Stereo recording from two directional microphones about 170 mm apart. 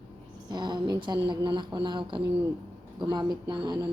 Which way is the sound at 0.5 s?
25° right (ahead or behind).